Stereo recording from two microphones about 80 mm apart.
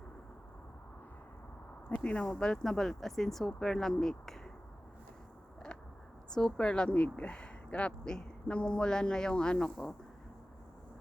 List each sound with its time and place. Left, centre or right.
1.9 s speech: centre
5.7 s a sound: centre
6.3 s speech: centre